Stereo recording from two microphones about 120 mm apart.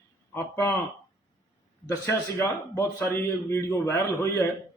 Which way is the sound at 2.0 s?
25° left (ahead or behind).